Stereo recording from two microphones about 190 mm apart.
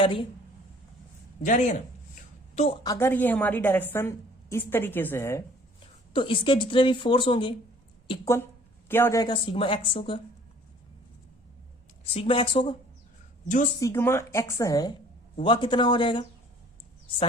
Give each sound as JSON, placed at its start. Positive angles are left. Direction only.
{"t": 0.0, "sound": "a woman's voice", "side_deg": 25}
{"t": 1.4, "sound": "speech", "side_deg": 35}
{"t": 2.8, "sound": "a woman's voice", "side_deg": 15}
{"t": 6.1, "sound": "a woman's voice", "side_deg": 25}
{"t": 8.9, "sound": "a woman's voice", "side_deg": 10}
{"t": 12.1, "sound": "a woman's voice", "side_deg": 30}
{"t": 13.7, "sound": "a woman's voice", "side_deg": 15}